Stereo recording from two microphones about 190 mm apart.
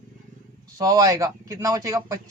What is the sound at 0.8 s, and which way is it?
Speech, 20° right (ahead or behind).